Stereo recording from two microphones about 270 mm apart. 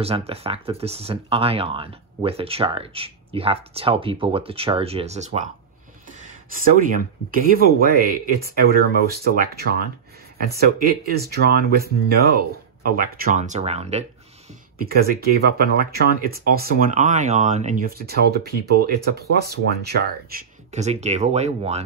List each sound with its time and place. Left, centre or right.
0.0 s speech: right
7.2 s speech: right
14.9 s speech: right